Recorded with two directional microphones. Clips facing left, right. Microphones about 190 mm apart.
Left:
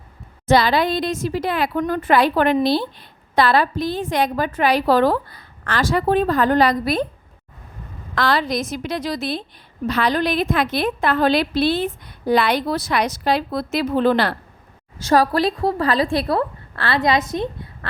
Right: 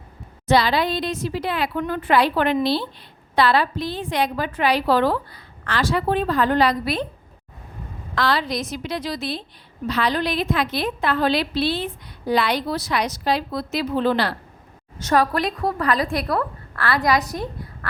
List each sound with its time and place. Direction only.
0.4 s a woman's voice: 50° left (ahead or behind)
8.1 s a woman's voice: 50° left (ahead or behind)
15.0 s a woman's voice: 35° left (ahead or behind)